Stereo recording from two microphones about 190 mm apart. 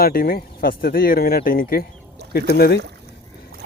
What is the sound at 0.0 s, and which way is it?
Speech, 50° left (ahead or behind).